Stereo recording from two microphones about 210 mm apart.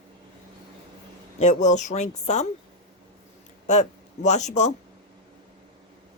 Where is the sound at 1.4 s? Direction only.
35° left (ahead or behind).